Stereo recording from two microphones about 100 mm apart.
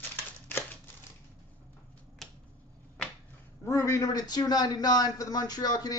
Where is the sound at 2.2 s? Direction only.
Centre (ahead or behind).